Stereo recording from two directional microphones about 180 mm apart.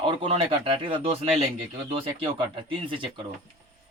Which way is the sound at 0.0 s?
30° right (ahead or behind).